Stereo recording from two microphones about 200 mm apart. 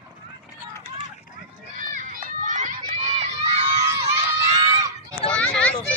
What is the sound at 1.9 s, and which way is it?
Run, 40° right (ahead or behind).